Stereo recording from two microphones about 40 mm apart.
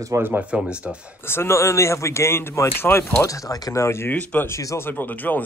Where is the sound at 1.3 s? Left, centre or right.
Left.